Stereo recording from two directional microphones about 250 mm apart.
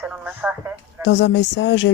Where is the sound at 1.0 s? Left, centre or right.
Left.